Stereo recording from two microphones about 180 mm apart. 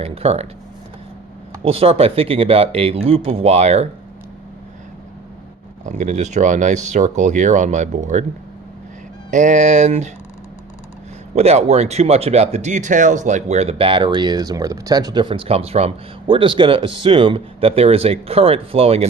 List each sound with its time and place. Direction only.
0.0 s speech: 35° right (ahead or behind)
1.6 s speech: 30° right (ahead or behind)
5.8 s speech: 40° right (ahead or behind)
9.3 s speech: 40° right (ahead or behind)
11.3 s speech: 35° right (ahead or behind)